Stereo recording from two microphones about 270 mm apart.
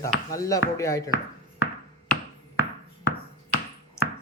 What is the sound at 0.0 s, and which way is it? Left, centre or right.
Speech, centre.